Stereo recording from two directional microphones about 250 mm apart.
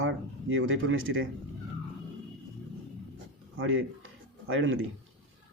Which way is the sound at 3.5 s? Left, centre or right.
Right.